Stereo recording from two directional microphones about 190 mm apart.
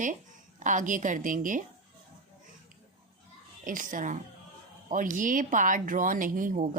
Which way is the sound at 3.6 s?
45° right (ahead or behind).